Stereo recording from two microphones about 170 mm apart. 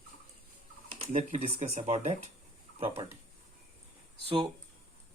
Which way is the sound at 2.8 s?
30° right (ahead or behind).